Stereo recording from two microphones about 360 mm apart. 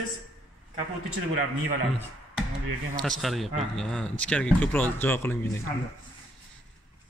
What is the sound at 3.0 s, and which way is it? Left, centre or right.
Speech, centre.